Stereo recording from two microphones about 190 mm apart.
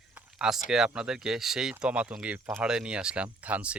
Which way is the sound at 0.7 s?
5° right (ahead or behind).